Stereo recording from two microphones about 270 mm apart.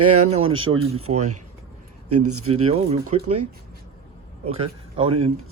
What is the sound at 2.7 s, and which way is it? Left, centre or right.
Speech, right.